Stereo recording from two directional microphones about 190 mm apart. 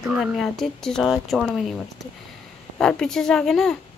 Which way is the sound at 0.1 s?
Centre (ahead or behind).